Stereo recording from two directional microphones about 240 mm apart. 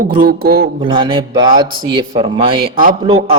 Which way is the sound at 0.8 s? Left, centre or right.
Right.